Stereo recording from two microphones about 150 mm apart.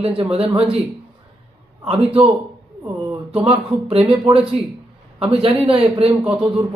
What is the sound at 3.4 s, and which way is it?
Speech, 40° right (ahead or behind).